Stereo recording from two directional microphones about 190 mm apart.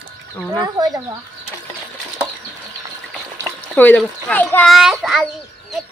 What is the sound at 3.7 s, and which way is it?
A child's voice, 10° left (ahead or behind).